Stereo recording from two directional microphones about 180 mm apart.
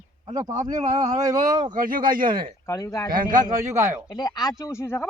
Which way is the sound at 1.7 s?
50° right (ahead or behind).